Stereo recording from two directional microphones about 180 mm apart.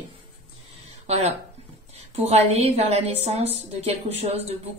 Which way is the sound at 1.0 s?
35° right (ahead or behind).